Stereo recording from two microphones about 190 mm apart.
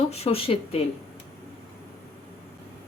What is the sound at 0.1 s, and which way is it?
Speech, 30° left (ahead or behind).